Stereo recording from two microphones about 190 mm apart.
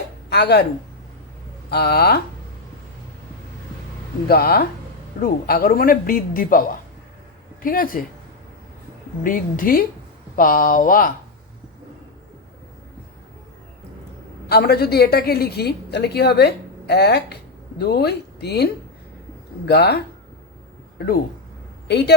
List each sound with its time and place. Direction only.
0.3 s speech: 60° left (ahead or behind)
1.7 s a woman's voice: 55° left (ahead or behind)
4.3 s a man's voice: 55° left (ahead or behind)
9.2 s a man's voice: 45° left (ahead or behind)
14.5 s a woman's voice: 55° left (ahead or behind)
21.8 s speech: 60° left (ahead or behind)